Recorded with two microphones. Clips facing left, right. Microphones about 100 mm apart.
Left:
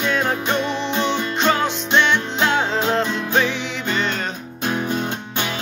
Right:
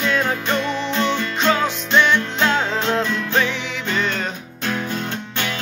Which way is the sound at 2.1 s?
20° left (ahead or behind).